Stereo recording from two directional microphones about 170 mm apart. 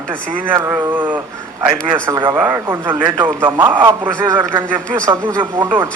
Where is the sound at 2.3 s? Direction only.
10° right (ahead or behind).